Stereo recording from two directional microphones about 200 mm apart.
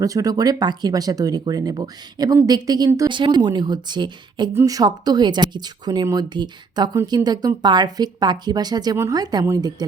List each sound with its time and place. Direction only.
0.0 s speech: 15° right (ahead or behind)